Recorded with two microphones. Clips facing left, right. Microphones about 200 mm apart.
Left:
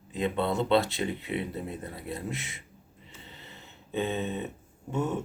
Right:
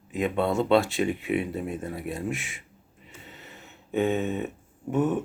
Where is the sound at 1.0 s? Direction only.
15° right (ahead or behind).